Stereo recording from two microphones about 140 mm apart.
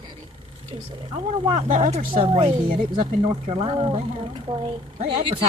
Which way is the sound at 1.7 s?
60° right (ahead or behind).